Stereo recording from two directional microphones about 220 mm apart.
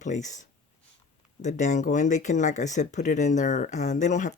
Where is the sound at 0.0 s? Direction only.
35° left (ahead or behind).